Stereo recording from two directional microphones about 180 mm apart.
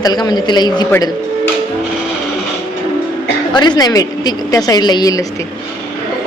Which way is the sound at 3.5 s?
25° left (ahead or behind).